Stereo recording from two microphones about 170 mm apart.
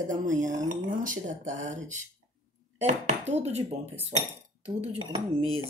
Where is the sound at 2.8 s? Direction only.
40° right (ahead or behind).